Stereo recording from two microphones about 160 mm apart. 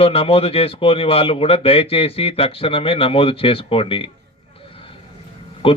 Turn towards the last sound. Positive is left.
turn(degrees=35)  # may be behind; listen again after turning